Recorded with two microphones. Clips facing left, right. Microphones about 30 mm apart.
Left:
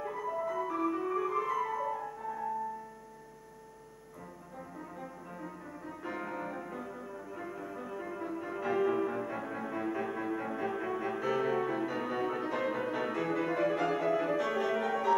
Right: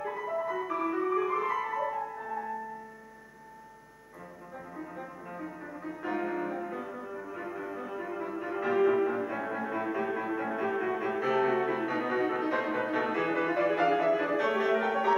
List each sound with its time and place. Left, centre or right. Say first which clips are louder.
0.0 s music: right 2 dB; centre
4.7 s music: right 4 dB; centre